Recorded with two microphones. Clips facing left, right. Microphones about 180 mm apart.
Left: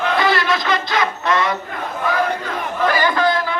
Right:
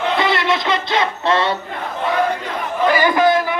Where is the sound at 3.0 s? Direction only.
20° right (ahead or behind).